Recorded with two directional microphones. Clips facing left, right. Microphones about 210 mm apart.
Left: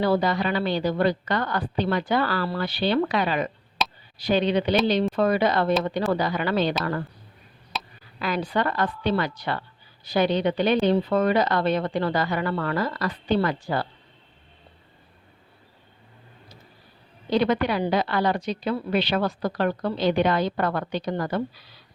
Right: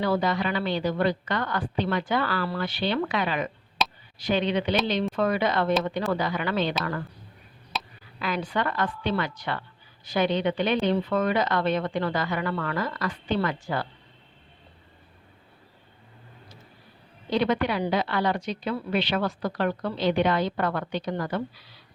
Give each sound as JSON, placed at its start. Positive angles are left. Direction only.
{"t": 0.0, "sound": "a woman's voice", "side_deg": 35}
{"t": 3.8, "sound": "a sound", "side_deg": 0}
{"t": 4.2, "sound": "a woman's voice", "side_deg": 35}
{"t": 7.7, "sound": "a sound", "side_deg": 0}
{"t": 8.2, "sound": "a woman's voice", "side_deg": 35}
{"t": 17.2, "sound": "a woman's voice", "side_deg": 35}